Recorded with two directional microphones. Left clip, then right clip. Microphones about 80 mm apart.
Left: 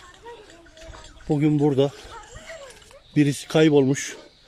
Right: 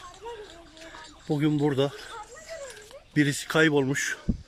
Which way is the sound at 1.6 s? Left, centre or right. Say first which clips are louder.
Left 6 dB; left.